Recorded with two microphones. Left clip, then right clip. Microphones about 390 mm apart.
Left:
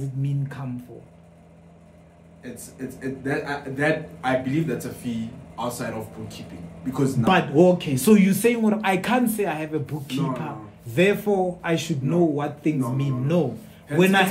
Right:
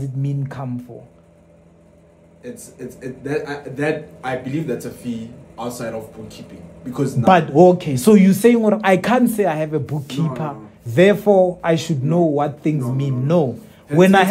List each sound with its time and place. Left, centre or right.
2.4 s a man's voice: centre
7.2 s speech: right